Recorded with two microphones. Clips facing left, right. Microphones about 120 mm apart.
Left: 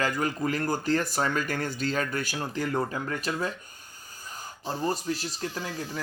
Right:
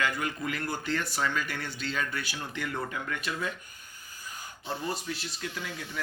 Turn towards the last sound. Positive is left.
turn(degrees=35)  # may be behind; listen again after turning